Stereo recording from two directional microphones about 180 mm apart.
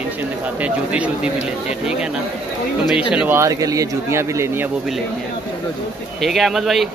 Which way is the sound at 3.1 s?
5° right (ahead or behind).